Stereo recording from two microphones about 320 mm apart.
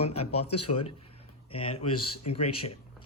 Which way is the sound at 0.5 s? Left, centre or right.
Left.